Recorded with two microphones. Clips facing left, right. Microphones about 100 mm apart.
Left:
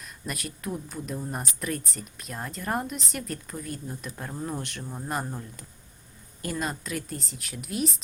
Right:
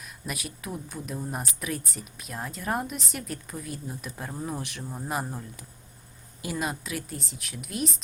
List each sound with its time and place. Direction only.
0.3 s speech: 5° right (ahead or behind)